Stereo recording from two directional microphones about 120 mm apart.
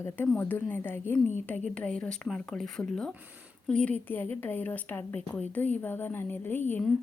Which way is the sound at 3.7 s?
10° left (ahead or behind).